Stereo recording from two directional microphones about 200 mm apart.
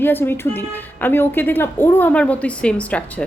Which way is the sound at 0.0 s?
10° left (ahead or behind).